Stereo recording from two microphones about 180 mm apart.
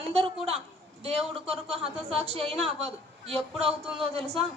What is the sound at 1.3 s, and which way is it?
A man's voice, 30° right (ahead or behind).